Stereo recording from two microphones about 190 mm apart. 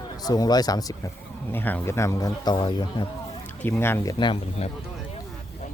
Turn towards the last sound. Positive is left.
turn(degrees=25)  # may be behind; listen again after turning